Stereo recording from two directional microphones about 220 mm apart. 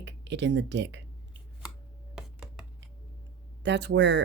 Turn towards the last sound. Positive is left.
turn(degrees=-50)  # may be behind; listen again after turning